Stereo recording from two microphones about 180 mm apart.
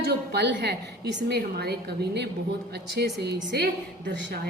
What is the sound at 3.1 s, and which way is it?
Speech, 65° right (ahead or behind).